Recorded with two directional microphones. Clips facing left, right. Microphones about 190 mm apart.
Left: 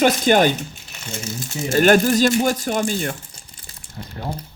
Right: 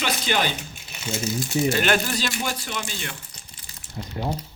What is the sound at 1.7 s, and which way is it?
Speech, 45° left (ahead or behind).